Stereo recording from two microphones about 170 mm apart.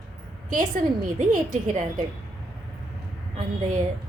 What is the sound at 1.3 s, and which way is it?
Speech, 45° right (ahead or behind).